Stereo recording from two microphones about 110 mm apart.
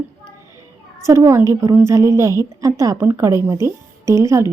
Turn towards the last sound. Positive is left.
turn(degrees=-25)  # may be behind; listen again after turning